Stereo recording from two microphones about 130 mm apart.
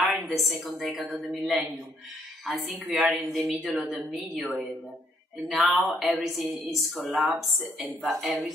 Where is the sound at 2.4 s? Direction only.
Centre (ahead or behind).